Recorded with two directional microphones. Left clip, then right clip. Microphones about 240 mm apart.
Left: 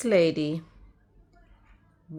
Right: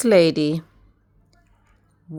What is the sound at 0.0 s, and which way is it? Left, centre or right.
Speech, right.